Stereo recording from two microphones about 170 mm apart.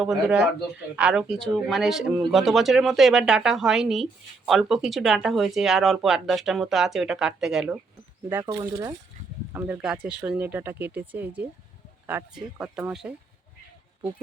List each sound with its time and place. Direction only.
0.0 s speech: 5° right (ahead or behind)
8.6 s speech: 20° right (ahead or behind)